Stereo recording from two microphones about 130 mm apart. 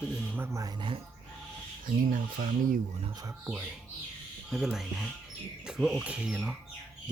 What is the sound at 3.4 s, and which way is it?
Speech, 10° right (ahead or behind).